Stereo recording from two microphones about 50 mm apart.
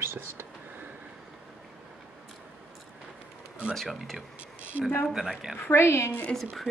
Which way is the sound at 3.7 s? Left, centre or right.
Centre.